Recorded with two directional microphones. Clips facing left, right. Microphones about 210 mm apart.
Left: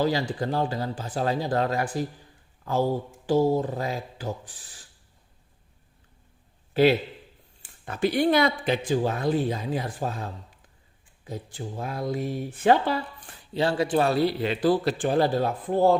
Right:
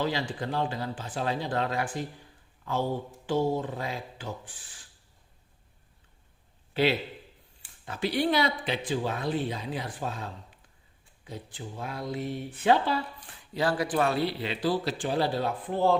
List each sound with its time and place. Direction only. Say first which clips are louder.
0.0 s speech: left 5 dB; 40° left (ahead or behind)
3.2 s speech: left 5 dB; 35° left (ahead or behind)
7.9 s speech: left 5 dB; 50° left (ahead or behind)
11.3 s speech: left 5 dB; 45° left (ahead or behind)
13.5 s speech: left 4 dB; 25° left (ahead or behind)